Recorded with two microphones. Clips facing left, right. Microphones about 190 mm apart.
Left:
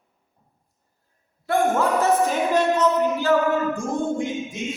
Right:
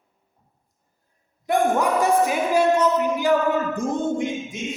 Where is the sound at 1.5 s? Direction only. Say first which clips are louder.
Even; 15° right (ahead or behind).